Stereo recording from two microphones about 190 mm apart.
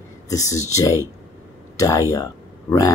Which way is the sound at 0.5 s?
15° left (ahead or behind).